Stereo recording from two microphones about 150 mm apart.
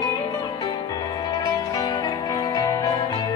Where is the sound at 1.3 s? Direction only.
25° left (ahead or behind).